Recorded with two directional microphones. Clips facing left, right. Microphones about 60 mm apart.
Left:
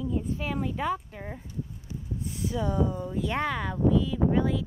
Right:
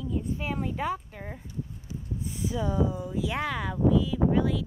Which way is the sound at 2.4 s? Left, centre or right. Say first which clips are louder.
Even; centre.